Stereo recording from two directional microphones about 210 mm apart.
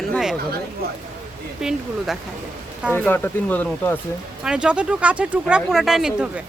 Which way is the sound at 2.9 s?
10° left (ahead or behind).